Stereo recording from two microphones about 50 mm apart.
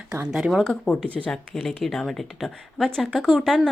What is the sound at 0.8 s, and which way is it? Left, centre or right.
Speech, left.